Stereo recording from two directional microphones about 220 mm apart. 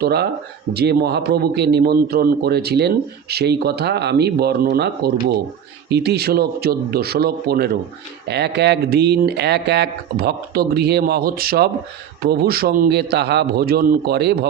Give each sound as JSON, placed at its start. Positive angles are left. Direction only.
{"t": 0.0, "sound": "a man's voice", "side_deg": -45}